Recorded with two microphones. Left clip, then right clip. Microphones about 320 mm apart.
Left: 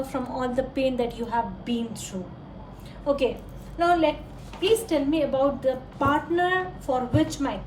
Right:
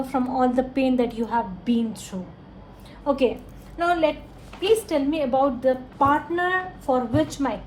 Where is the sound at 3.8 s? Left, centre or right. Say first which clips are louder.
Even; centre.